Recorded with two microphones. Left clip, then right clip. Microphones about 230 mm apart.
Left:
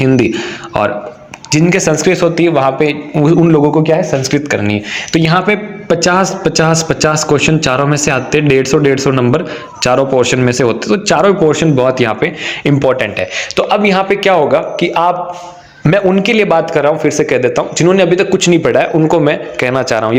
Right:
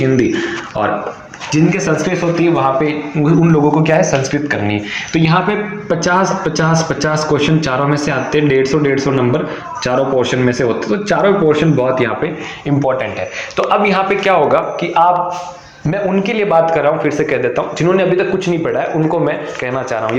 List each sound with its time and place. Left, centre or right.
1.5 s speech: left
3.8 s speech: left
4.2 s speech: left
13.6 s a man's voice: left
14.8 s speech: left